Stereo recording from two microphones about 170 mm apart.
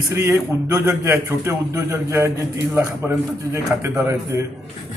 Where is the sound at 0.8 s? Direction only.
15° right (ahead or behind).